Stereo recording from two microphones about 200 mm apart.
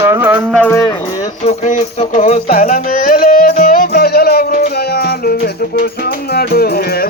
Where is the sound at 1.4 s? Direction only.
35° left (ahead or behind); by 5.3 s 50° left (ahead or behind).